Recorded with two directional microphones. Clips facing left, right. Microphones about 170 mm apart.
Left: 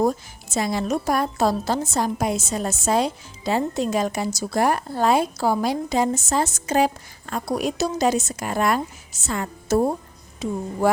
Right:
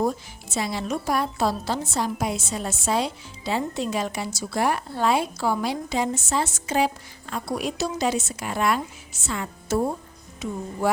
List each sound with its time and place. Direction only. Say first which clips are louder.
0.0 s speech: left 3 dB; 45° left (ahead or behind)